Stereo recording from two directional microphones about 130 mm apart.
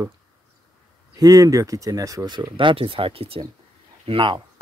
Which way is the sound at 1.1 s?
25° right (ahead or behind).